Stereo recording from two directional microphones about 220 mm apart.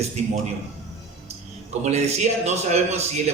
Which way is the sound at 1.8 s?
30° right (ahead or behind).